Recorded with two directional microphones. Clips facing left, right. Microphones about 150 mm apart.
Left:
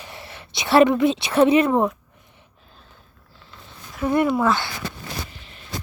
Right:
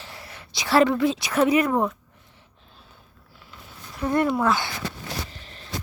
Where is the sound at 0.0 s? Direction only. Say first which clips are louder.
Left 3 dB; 20° left (ahead or behind).